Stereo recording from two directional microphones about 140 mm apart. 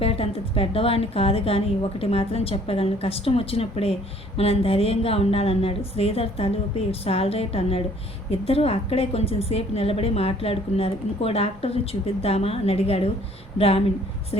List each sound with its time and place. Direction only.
0.0 s a woman's voice: 45° left (ahead or behind)